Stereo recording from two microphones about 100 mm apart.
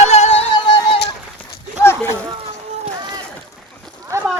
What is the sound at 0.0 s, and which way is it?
Music, 85° left.